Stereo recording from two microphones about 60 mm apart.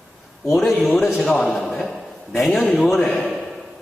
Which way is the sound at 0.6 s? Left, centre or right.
Centre.